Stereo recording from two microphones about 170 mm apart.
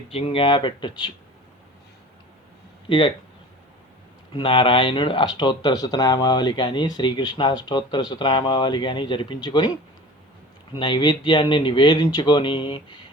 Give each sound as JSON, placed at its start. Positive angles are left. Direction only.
{"t": 0.1, "sound": "speech", "side_deg": 35}
{"t": 4.4, "sound": "speech", "side_deg": 30}
{"t": 10.8, "sound": "speech", "side_deg": 30}